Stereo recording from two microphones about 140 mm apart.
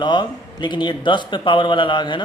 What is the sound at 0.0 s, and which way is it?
Speech, 35° left (ahead or behind).